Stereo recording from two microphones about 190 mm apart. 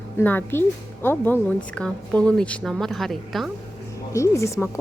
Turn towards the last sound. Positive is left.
turn(degrees=15)  # may be behind; listen again after turning